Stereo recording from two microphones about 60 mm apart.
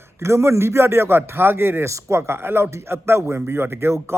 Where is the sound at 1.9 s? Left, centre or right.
Right.